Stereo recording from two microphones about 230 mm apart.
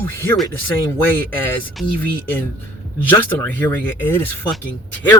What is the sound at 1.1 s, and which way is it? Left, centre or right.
Speech, centre.